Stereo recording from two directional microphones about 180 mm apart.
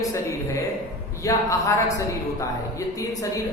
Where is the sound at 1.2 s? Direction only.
15° left (ahead or behind).